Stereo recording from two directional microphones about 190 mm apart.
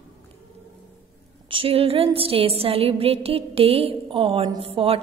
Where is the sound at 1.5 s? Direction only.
30° right (ahead or behind).